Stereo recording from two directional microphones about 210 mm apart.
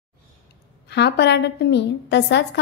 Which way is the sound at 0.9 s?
55° left (ahead or behind).